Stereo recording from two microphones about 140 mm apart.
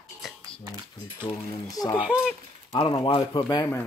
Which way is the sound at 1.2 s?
25° left (ahead or behind).